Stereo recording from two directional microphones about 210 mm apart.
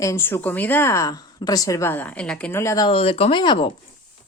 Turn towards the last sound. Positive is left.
turn(degrees=25)  # may be behind; listen again after turning